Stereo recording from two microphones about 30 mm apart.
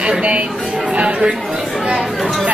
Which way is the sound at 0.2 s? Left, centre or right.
Right.